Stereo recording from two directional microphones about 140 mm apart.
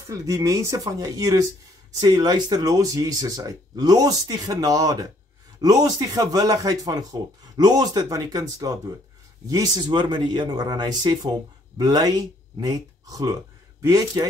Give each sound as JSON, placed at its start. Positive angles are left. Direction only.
{"t": 0.1, "sound": "speech", "side_deg": -25}